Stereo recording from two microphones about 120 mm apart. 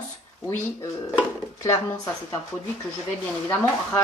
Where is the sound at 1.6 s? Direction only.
25° left (ahead or behind).